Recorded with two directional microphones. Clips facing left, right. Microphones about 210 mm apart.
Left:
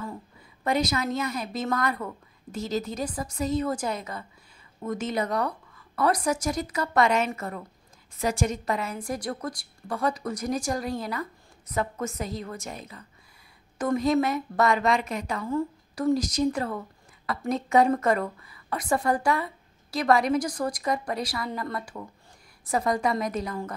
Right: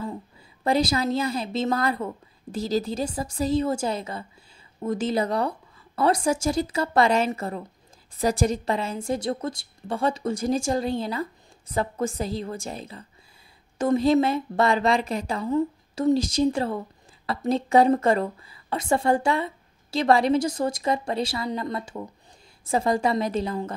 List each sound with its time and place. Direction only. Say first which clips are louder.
0.7 s a woman's voice: right 3 dB; 30° right (ahead or behind)